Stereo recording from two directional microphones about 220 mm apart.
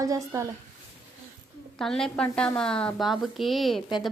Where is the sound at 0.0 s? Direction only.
15° right (ahead or behind).